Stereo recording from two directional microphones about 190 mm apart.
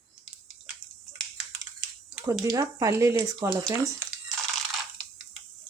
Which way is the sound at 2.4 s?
15° right (ahead or behind).